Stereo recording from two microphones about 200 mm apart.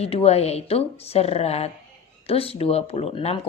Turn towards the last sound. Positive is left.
turn(degrees=30)  # may be behind; listen again after turning